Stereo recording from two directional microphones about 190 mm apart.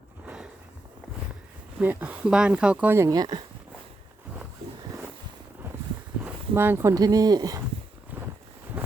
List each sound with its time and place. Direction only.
1.8 s speech: 10° right (ahead or behind)
6.2 s speech: 10° right (ahead or behind)
8.1 s a sound: 10° right (ahead or behind)